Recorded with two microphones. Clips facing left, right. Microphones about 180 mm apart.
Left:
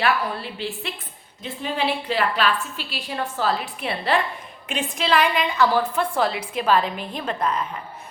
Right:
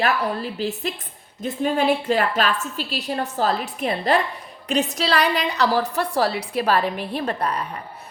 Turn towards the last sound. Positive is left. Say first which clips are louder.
# even
turn(degrees=-35)  # may be behind; listen again after turning